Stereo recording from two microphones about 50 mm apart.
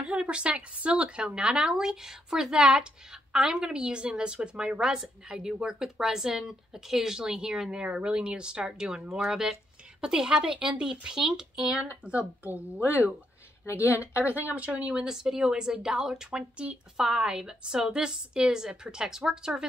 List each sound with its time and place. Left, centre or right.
0.0 s a woman's voice: right
12.4 s a woman's voice: right; by 19.6 s centre